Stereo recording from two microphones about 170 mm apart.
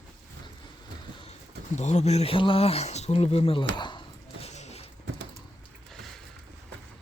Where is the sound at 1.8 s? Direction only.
45° left (ahead or behind); by 4.0 s 25° left (ahead or behind).